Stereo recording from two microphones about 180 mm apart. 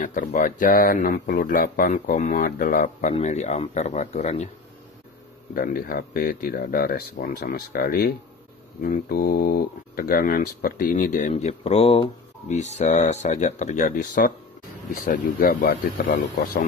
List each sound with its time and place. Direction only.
0.0 s speech: 50° left (ahead or behind)
5.5 s speech: 55° left (ahead or behind)